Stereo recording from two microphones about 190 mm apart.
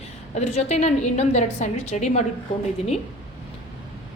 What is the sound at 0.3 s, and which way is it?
A woman's voice, 35° left (ahead or behind).